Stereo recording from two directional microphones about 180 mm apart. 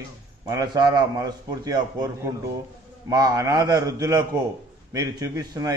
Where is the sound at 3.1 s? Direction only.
20° right (ahead or behind).